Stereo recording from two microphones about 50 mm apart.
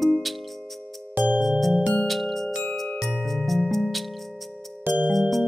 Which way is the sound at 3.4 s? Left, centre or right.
Centre.